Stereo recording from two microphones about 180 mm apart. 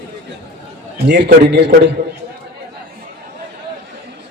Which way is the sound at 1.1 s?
70° right (ahead or behind).